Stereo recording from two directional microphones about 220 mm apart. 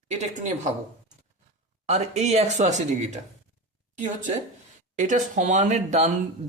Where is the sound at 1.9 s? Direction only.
30° right (ahead or behind).